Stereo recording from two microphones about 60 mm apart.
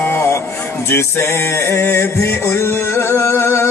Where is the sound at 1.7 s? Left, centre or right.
Left.